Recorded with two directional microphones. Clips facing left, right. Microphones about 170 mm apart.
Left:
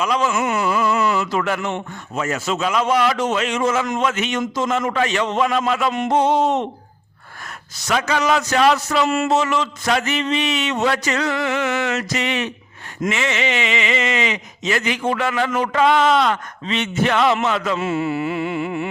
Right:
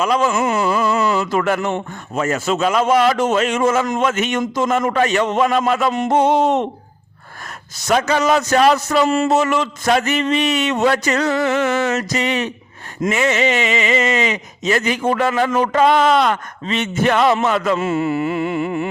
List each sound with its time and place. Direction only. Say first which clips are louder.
0.0 s speech: right 3 dB; 45° right (ahead or behind)
0.3 s speech: right 2 dB; 35° right (ahead or behind)
6.1 s a sound: right 2 dB; 55° right (ahead or behind)
7.9 s speech: right 3 dB; 45° right (ahead or behind)
9.3 s speech: right 2 dB; 50° right (ahead or behind)